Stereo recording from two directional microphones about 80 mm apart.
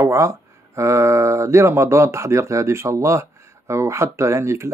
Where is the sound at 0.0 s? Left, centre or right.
Right.